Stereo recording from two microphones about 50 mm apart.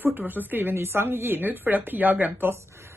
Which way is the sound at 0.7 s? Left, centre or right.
Right.